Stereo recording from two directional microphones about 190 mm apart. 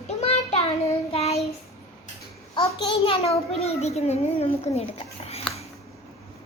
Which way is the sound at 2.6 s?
30° left (ahead or behind).